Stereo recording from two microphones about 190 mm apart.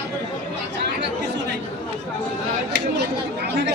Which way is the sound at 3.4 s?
60° right (ahead or behind).